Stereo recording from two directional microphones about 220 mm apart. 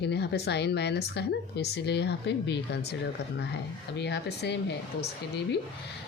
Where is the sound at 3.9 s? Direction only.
50° left (ahead or behind).